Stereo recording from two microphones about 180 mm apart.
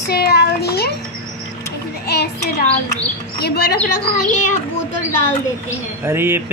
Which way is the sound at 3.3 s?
65° left (ahead or behind).